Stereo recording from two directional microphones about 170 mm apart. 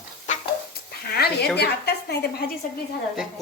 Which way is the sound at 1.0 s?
65° left (ahead or behind).